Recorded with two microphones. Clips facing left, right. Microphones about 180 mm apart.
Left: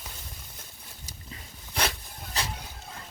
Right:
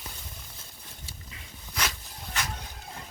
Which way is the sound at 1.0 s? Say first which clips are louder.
Left 4 dB; 35° left (ahead or behind).